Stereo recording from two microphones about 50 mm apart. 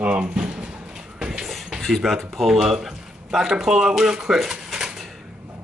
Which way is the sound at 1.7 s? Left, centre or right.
Centre.